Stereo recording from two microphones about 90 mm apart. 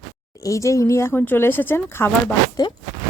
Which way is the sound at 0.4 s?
35° left (ahead or behind).